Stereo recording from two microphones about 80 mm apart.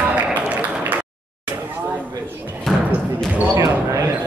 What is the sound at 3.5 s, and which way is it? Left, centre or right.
Basketball bounce, right.